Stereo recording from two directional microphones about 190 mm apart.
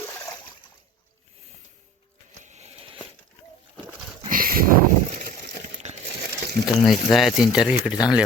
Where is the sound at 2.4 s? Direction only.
35° right (ahead or behind).